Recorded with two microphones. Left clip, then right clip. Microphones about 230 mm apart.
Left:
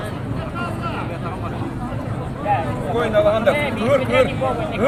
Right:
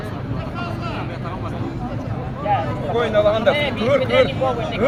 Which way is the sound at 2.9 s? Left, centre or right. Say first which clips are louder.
Even; centre.